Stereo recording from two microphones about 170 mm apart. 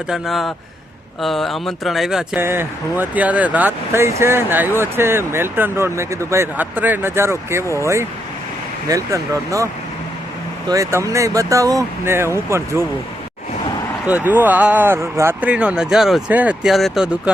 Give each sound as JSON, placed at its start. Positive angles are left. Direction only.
{"t": 0.1, "sound": "a man's voice", "side_deg": 0}
{"t": 10.7, "sound": "speech", "side_deg": -20}
{"t": 14.1, "sound": "speech", "side_deg": -10}